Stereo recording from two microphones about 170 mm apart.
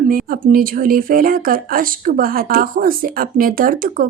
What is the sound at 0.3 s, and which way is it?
Speech, 55° right (ahead or behind).